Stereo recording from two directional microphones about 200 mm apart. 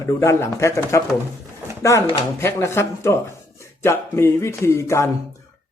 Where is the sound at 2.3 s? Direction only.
10° left (ahead or behind).